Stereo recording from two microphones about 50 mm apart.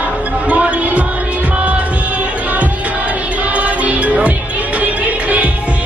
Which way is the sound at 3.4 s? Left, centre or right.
Right.